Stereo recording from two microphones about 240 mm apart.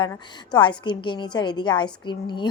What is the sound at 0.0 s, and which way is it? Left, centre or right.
A woman's voice, centre.